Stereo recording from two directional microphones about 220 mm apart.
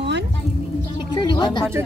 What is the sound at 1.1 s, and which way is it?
Speech, 20° left (ahead or behind).